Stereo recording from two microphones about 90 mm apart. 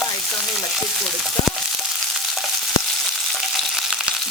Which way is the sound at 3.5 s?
5° right (ahead or behind).